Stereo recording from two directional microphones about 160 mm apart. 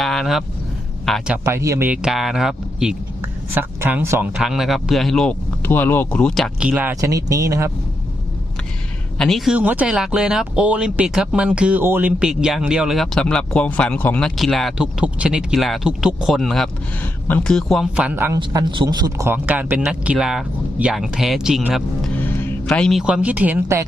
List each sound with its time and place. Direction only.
0.0 s speech: centre (ahead or behind)
1.5 s speech: 20° right (ahead or behind); by 2.9 s 5° right (ahead or behind)
3.2 s a woman's voice: 15° right (ahead or behind)
4.4 s speech: centre (ahead or behind); by 7.7 s 20° right (ahead or behind)
9.1 s speech: 5° left (ahead or behind)
17.9 s speech: 10° right (ahead or behind)
18.3 s speech: 30° right (ahead or behind); by 21.8 s centre (ahead or behind)
22.2 s music: 10° left (ahead or behind)
22.6 s speech: 5° left (ahead or behind); by 23.8 s 15° right (ahead or behind)